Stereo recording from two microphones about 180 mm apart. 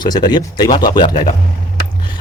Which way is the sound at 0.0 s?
25° left (ahead or behind).